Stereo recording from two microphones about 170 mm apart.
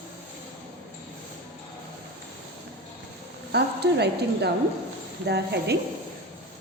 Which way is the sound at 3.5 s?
75° right (ahead or behind).